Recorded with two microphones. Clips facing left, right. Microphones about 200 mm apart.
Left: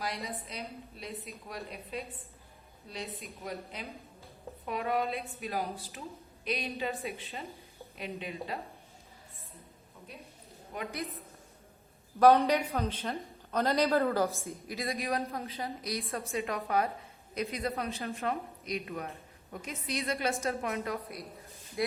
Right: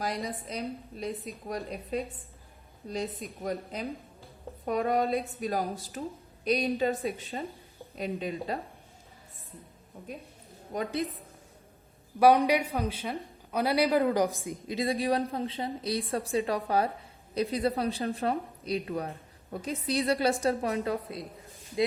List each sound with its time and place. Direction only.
0.4 s a woman's voice: 45° right (ahead or behind)
10.7 s a woman's voice: 40° right (ahead or behind)
12.2 s a woman's voice: 10° right (ahead or behind)
14.8 s a woman's voice: 30° right (ahead or behind)